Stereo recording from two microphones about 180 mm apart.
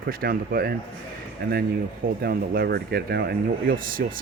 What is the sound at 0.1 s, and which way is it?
Speech, 55° right (ahead or behind).